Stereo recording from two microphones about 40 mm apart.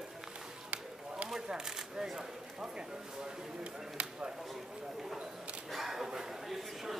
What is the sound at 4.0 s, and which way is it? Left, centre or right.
Chop, right.